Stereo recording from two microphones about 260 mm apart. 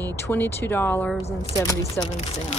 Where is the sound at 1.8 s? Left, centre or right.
Left.